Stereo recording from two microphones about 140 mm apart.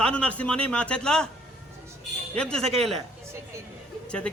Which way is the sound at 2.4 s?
5° left (ahead or behind).